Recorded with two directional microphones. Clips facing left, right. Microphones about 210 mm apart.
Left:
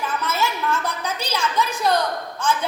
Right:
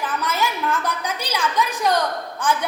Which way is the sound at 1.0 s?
15° right (ahead or behind).